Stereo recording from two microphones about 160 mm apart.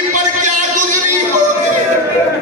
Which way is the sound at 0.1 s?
50° right (ahead or behind).